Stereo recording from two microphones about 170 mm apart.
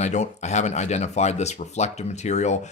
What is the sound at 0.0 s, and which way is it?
Speech, 40° left (ahead or behind).